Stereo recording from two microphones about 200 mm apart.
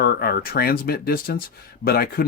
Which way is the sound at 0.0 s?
50° left (ahead or behind).